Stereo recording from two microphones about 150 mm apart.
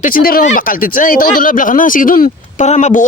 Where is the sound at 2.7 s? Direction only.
50° left (ahead or behind).